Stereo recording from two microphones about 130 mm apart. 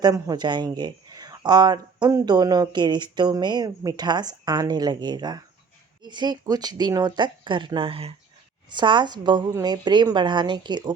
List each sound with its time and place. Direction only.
0.0 s speech: 30° right (ahead or behind); by 8.1 s 45° right (ahead or behind)
8.7 s speech: 35° right (ahead or behind)